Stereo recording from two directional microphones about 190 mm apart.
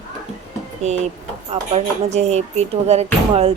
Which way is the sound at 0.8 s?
35° right (ahead or behind).